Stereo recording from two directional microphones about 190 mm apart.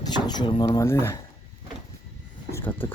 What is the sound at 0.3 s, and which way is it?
Speech, 25° left (ahead or behind).